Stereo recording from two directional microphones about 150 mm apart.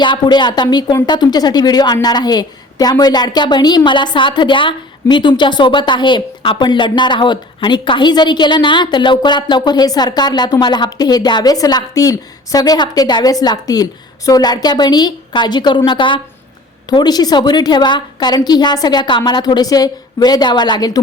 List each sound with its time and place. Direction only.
0.0 s speech: 30° left (ahead or behind)